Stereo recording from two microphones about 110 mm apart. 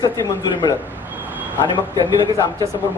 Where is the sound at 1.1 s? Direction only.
15° right (ahead or behind).